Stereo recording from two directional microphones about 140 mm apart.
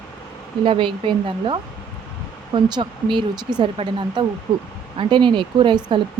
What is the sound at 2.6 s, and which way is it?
A woman's voice, 30° right (ahead or behind).